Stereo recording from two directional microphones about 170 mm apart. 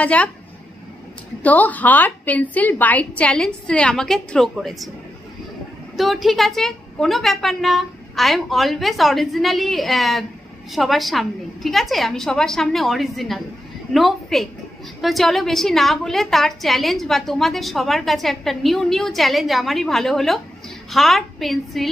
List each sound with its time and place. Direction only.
0.0 s a woman's voice: 10° left (ahead or behind)
1.4 s a woman's voice: 10° left (ahead or behind)
5.9 s a woman's voice: centre (ahead or behind)